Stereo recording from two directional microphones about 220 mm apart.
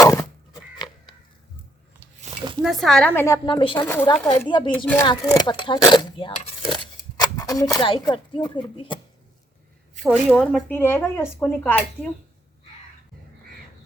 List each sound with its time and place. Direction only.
0.0 s a sound: 15° left (ahead or behind)
2.6 s speech: centre (ahead or behind); by 3.8 s 20° left (ahead or behind)
3.8 s speech: 10° left (ahead or behind)
4.3 s speech: 20° left (ahead or behind)
10.0 s speech: centre (ahead or behind)